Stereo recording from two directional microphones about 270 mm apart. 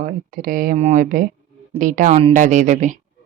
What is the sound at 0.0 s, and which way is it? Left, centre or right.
Speech, right.